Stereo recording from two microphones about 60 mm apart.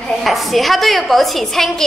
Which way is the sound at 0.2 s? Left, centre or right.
Centre.